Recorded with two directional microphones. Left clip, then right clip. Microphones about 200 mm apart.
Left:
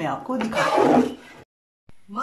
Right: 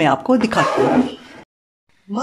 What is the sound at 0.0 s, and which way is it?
Speech, 50° right (ahead or behind).